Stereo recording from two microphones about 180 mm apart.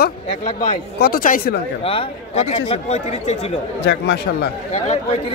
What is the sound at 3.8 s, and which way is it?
Speech, 70° left (ahead or behind).